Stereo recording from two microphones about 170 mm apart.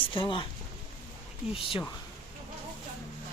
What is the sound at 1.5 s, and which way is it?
Speech, 30° left (ahead or behind).